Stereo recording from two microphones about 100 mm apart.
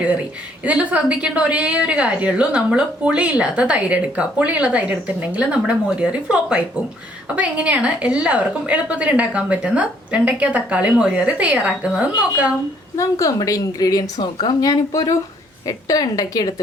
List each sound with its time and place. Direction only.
0.6 s a woman's voice: 15° right (ahead or behind)
13.0 s a woman's voice: 35° left (ahead or behind)